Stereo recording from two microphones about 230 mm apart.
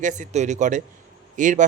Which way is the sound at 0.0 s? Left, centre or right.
Right.